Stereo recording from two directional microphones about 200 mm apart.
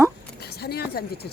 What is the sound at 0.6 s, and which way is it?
Speech, 50° left (ahead or behind).